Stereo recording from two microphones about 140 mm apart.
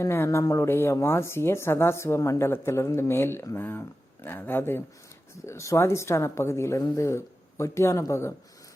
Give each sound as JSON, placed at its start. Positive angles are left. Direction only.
{"t": 0.0, "sound": "speech", "side_deg": 20}